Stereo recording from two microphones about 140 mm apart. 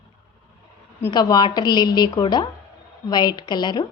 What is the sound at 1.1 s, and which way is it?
A woman's voice, 30° left (ahead or behind).